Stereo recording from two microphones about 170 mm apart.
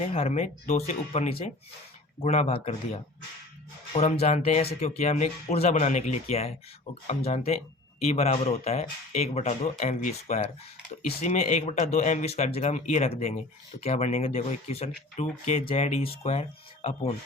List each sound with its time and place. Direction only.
0.1 s speech: 40° left (ahead or behind)
3.9 s speech: 40° left (ahead or behind)